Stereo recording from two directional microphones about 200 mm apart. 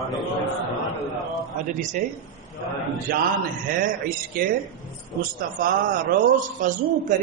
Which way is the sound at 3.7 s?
45° right (ahead or behind).